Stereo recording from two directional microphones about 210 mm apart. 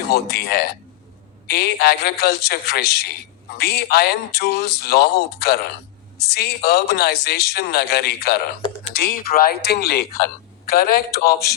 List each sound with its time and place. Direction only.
0.1 s a woman's voice: 50° left (ahead or behind)